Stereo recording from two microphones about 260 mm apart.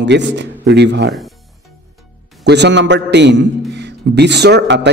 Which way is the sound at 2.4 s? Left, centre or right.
Right.